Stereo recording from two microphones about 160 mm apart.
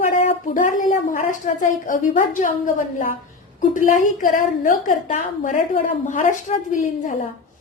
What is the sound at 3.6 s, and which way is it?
A woman's voice, 55° left (ahead or behind).